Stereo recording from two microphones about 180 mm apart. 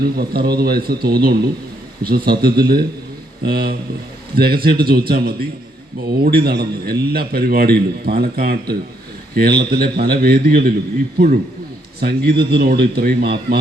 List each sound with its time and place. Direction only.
0.0 s a man's voice: 60° right (ahead or behind)
11.9 s a man's voice: 60° right (ahead or behind)